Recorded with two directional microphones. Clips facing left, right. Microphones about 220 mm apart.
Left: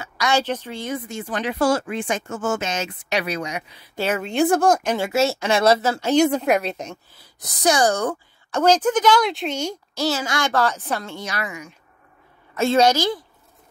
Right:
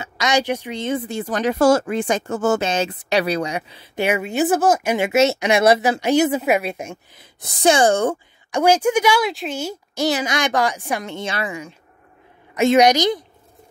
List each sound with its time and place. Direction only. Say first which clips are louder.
0.0 s speech: right 2 dB; 20° right (ahead or behind)
4.0 s speech: right 1 dB; 10° right (ahead or behind)
4.9 s speech: right 4 dB; 20° right (ahead or behind)
6.2 s speech: even; 5° right (ahead or behind)
7.3 s speech: right 3 dB; 25° right (ahead or behind)
8.5 s speech: right 1 dB; 10° right (ahead or behind)
9.9 s speech: right 3 dB; 15° right (ahead or behind)
12.5 s speech: right 3 dB; 15° right (ahead or behind)